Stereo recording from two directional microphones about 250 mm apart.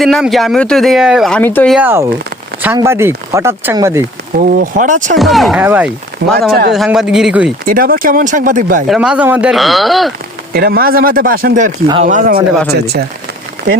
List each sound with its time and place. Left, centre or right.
0.0 s speech: centre
4.4 s speech: right
5.1 s speech: centre
6.2 s speech: right
6.7 s speech: centre
7.6 s speech: right
8.9 s speech: centre
10.5 s speech: right